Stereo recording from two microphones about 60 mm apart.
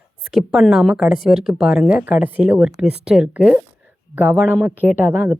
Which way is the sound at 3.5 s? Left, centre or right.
Right.